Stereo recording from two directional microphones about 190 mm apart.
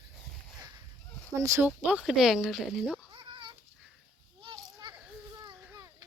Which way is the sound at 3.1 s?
25° right (ahead or behind).